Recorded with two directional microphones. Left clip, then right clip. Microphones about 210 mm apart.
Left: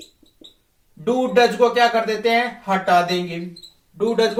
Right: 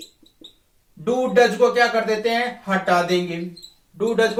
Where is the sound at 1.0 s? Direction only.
10° right (ahead or behind).